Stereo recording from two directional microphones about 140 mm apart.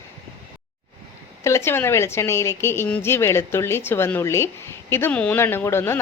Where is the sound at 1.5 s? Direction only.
20° left (ahead or behind).